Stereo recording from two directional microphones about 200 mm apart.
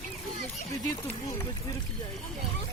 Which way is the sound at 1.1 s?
15° left (ahead or behind).